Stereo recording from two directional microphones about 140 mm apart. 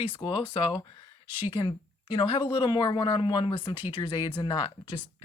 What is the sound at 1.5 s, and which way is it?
Speech, 35° left (ahead or behind).